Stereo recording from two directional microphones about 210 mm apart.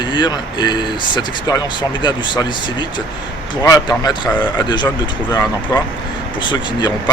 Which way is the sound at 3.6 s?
15° left (ahead or behind).